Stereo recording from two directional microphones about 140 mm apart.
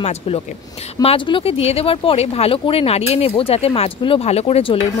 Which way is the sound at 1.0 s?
35° left (ahead or behind).